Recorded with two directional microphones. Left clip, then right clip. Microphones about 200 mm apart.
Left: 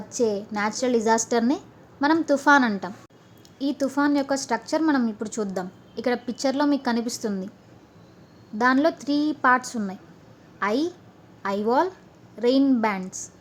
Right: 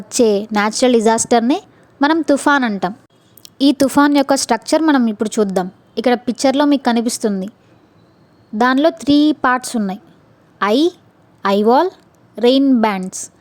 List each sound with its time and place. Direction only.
0.1 s a woman's voice: 45° right (ahead or behind)
3.4 s a woman's voice: 50° right (ahead or behind)
8.5 s a woman's voice: 40° right (ahead or behind)